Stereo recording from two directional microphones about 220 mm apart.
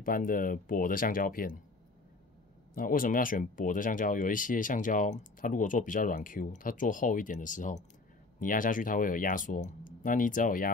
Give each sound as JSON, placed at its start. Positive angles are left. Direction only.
{"t": 0.0, "sound": "speech", "side_deg": 40}
{"t": 2.7, "sound": "speech", "side_deg": 40}